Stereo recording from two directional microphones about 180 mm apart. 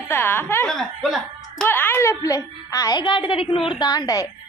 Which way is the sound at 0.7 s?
Centre (ahead or behind).